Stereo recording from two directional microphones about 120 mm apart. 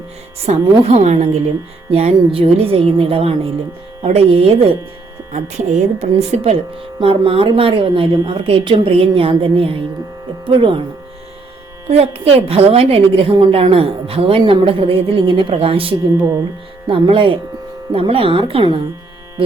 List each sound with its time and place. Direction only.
0.4 s a woman's voice: 60° right (ahead or behind)
5.3 s speech: 70° right (ahead or behind); by 10.8 s 45° right (ahead or behind)
11.9 s a woman's voice: 60° right (ahead or behind)